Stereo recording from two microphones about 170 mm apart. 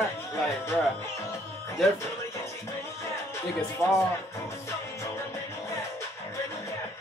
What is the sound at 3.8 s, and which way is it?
Music, 15° left (ahead or behind).